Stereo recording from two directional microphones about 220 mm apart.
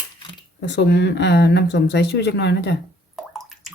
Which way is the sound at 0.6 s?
50° left (ahead or behind).